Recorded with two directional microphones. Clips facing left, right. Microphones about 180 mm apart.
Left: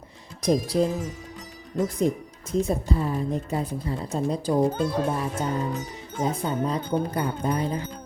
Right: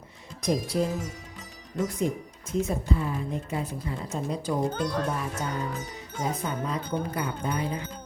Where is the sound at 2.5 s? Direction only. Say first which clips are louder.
Left 3 dB; 35° left (ahead or behind).